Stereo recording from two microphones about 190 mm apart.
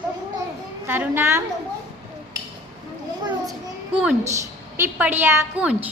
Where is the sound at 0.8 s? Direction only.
10° right (ahead or behind).